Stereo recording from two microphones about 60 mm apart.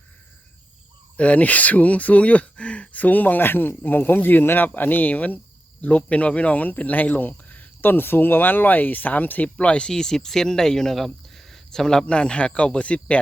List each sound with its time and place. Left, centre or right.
1.1 s speech: left